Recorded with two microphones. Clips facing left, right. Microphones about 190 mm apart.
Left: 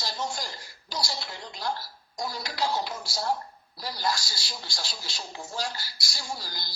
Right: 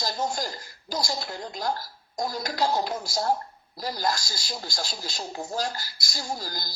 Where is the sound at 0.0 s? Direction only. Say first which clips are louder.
Right 4 dB; 45° right (ahead or behind).